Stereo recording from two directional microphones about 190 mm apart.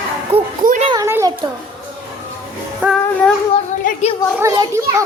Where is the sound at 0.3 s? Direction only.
35° right (ahead or behind).